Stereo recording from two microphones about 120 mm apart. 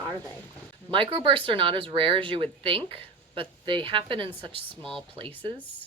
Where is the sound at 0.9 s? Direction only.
45° right (ahead or behind).